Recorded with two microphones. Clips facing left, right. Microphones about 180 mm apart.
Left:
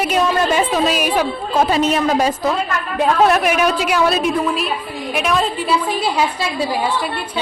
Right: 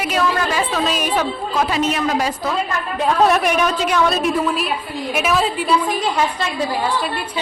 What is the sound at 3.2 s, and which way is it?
A woman's voice, centre (ahead or behind).